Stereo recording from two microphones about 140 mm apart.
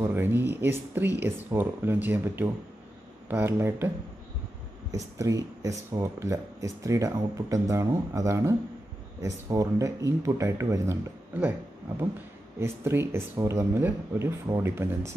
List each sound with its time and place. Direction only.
0.0 s speech: 15° right (ahead or behind)
4.9 s speech: 25° right (ahead or behind)
12.5 s speech: 20° right (ahead or behind)